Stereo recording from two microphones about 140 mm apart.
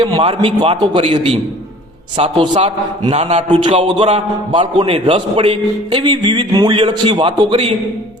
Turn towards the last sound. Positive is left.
turn(degrees=-35)  # may be behind; listen again after turning